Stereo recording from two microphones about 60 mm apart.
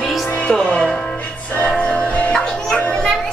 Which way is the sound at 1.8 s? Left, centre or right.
Left.